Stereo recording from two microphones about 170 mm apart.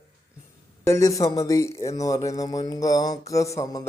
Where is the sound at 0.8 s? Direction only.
15° left (ahead or behind).